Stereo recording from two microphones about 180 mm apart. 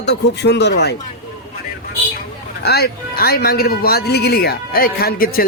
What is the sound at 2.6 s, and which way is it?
Speech, 60° left (ahead or behind).